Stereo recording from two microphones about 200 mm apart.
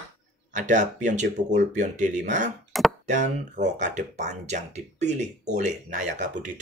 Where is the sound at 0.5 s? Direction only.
40° right (ahead or behind).